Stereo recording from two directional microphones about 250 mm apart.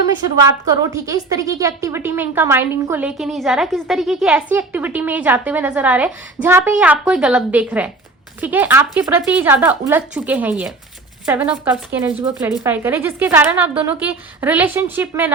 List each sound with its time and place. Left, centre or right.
0.3 s a woman's voice: centre